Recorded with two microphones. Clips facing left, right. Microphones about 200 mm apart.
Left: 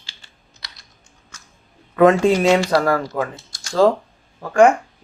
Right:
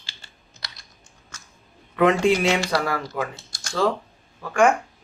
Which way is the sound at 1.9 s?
45° left (ahead or behind).